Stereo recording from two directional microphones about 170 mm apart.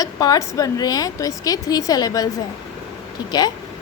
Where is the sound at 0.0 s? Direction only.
20° left (ahead or behind).